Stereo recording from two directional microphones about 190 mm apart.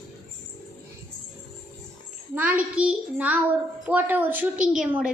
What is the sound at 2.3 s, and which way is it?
A woman's voice, 10° right (ahead or behind).